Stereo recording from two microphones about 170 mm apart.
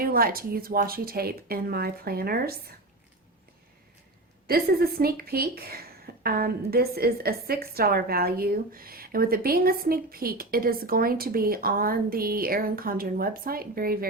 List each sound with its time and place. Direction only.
0.0 s a woman's voice: 60° right (ahead or behind)
4.4 s a woman's voice: 60° right (ahead or behind)